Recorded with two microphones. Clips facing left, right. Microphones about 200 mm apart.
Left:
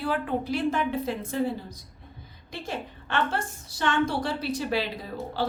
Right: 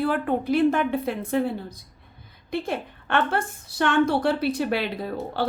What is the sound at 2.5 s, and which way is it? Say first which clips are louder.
A woman's voice: right 7 dB; 55° right (ahead or behind).